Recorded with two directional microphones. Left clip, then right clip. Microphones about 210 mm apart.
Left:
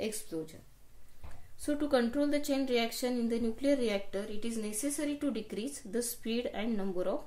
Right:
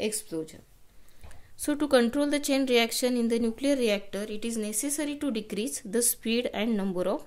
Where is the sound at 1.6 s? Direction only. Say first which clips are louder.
Right 6 dB; 40° right (ahead or behind).